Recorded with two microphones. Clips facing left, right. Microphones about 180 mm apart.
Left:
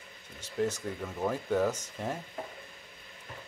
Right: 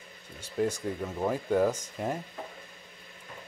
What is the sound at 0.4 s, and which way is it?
Speech, 10° right (ahead or behind).